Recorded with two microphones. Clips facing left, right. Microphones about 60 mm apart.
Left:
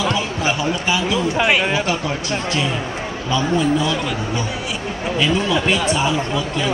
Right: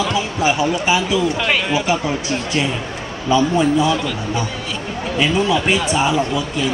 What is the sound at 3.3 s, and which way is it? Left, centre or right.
Speech, centre.